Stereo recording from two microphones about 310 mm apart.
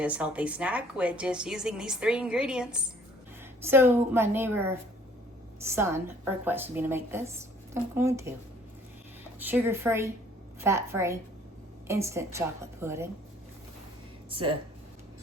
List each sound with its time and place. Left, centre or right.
0.0 s a woman's voice: centre
9.4 s speech: centre
14.3 s speech: centre